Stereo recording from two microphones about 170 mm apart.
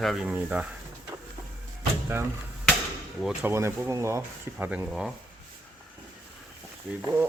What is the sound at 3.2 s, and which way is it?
Speech, 10° right (ahead or behind).